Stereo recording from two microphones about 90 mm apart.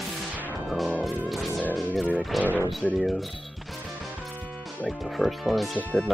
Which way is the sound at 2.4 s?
20° right (ahead or behind).